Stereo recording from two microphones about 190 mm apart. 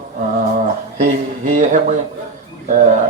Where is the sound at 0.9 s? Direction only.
40° right (ahead or behind).